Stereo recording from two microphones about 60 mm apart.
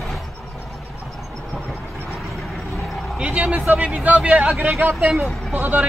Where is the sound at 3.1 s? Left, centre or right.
Centre.